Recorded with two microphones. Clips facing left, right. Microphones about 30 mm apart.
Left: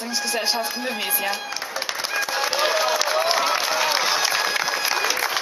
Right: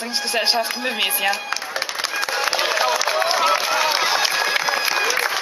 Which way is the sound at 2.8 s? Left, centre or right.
Centre.